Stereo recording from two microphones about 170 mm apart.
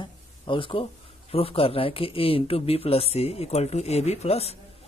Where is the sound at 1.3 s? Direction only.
35° left (ahead or behind).